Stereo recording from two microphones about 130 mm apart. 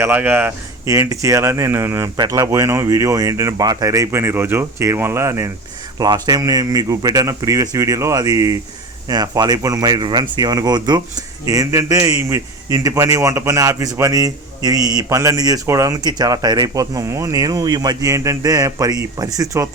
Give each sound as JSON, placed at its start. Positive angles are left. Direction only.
{"t": 0.0, "sound": "speech", "side_deg": -15}
{"t": 0.9, "sound": "a man's voice", "side_deg": -25}
{"t": 6.0, "sound": "a man's voice", "side_deg": -30}